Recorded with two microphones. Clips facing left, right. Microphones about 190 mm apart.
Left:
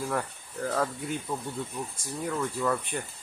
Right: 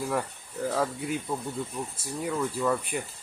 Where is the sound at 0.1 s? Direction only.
5° right (ahead or behind).